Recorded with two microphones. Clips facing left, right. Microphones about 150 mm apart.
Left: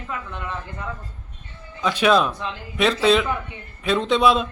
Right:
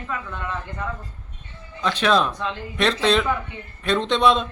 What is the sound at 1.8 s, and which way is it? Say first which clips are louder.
A man's voice: left 2 dB; 10° left (ahead or behind).